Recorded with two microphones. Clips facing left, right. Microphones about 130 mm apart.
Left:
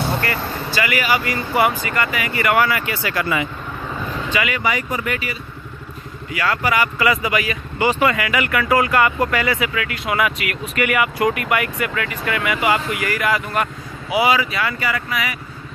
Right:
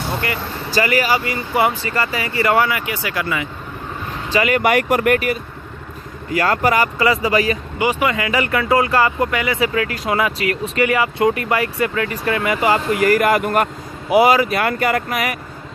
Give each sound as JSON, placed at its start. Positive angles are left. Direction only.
{"t": 0.7, "sound": "speech", "side_deg": -40}
{"t": 1.2, "sound": "speech", "side_deg": -25}
{"t": 2.7, "sound": "speech", "side_deg": -15}
{"t": 4.3, "sound": "speech", "side_deg": -35}
{"t": 4.6, "sound": "speech", "side_deg": -60}
{"t": 7.8, "sound": "speech", "side_deg": -15}
{"t": 8.2, "sound": "speech", "side_deg": -30}
{"t": 9.6, "sound": "speech", "side_deg": -35}